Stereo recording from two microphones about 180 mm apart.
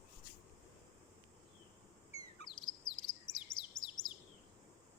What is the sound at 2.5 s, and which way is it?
Chirp, 25° left (ahead or behind).